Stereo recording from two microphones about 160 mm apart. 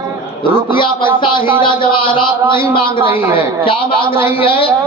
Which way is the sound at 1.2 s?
30° left (ahead or behind).